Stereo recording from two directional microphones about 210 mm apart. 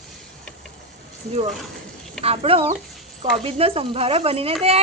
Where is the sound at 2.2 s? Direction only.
30° right (ahead or behind).